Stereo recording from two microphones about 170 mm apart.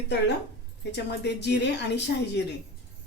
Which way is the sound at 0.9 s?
90° left.